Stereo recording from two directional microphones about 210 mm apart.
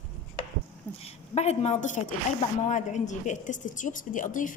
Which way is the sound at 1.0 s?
30° left (ahead or behind).